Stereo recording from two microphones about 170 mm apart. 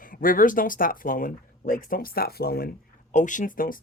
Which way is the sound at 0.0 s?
55° left (ahead or behind).